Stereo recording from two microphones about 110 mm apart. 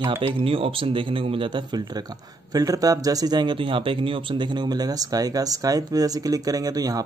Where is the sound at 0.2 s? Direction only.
50° right (ahead or behind).